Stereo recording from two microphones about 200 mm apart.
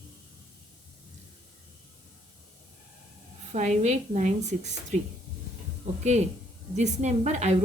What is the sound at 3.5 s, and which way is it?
Speech, 35° right (ahead or behind).